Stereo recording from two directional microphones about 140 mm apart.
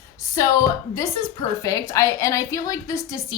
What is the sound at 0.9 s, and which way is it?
A woman's voice, 25° left (ahead or behind).